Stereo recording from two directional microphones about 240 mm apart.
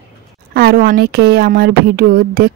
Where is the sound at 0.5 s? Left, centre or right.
Right.